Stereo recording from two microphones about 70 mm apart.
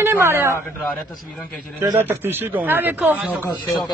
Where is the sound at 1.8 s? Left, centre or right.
Right.